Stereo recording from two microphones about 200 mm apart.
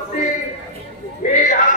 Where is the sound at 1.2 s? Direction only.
40° left (ahead or behind).